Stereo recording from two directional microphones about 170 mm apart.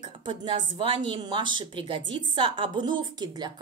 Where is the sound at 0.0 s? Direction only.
30° right (ahead or behind).